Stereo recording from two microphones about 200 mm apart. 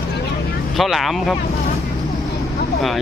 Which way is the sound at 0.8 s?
Centre (ahead or behind).